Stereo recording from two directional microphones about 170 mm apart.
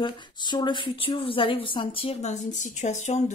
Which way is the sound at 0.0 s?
25° left (ahead or behind).